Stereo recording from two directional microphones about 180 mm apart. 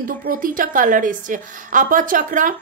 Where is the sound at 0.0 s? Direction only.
50° right (ahead or behind).